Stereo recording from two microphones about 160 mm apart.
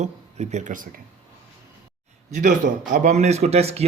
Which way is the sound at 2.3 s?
50° right (ahead or behind).